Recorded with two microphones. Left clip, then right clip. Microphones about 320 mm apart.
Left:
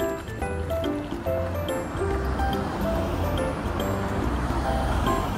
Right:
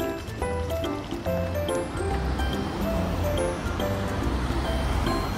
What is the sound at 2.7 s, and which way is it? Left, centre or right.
Music, centre.